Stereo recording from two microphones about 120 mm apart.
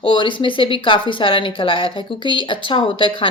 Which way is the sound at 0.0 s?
40° left (ahead or behind).